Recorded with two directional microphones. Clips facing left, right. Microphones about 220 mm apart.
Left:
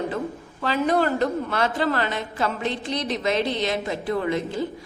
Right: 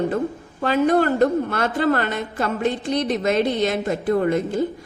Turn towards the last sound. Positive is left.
turn(degrees=-50)  # may be behind; listen again after turning